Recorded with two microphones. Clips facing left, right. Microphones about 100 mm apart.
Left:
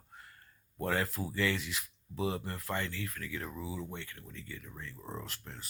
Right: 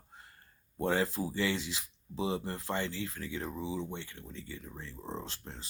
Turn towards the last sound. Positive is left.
turn(degrees=-25)  # may be behind; listen again after turning